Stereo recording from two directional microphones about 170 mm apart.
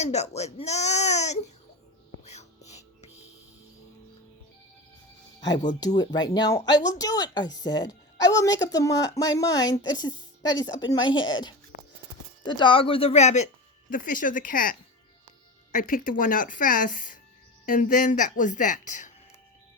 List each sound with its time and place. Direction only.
0.0 s speech: 40° left (ahead or behind)
2.2 s whispering: 40° left (ahead or behind)
5.6 s speech: 25° left (ahead or behind)
11.7 s music: 90° left
12.4 s speech: 25° left (ahead or behind); by 19.1 s 45° left (ahead or behind)